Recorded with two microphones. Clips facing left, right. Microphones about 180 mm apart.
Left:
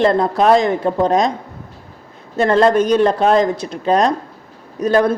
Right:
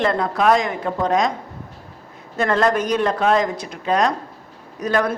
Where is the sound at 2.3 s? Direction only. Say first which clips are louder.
Left 6 dB; 30° left (ahead or behind).